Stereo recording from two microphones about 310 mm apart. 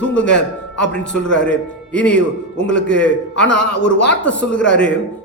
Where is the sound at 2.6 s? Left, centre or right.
Left.